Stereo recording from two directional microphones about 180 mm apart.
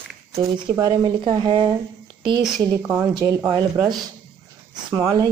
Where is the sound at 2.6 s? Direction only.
15° right (ahead or behind).